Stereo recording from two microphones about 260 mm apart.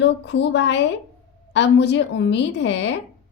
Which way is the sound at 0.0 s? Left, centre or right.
Left.